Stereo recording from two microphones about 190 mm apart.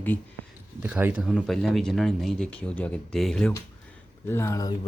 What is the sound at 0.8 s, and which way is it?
Speech, 10° right (ahead or behind).